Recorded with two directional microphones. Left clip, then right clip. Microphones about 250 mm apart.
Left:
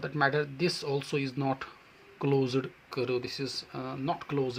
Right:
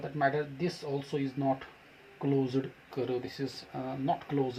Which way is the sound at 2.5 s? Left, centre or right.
Centre.